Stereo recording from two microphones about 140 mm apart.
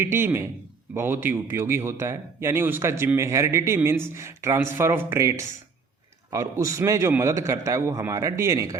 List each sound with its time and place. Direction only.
0.0 s a man's voice: 15° right (ahead or behind)